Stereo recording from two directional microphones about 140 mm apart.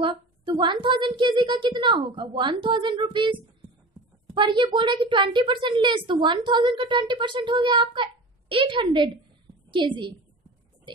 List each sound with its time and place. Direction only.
0.0 s a woman's voice: 35° right (ahead or behind)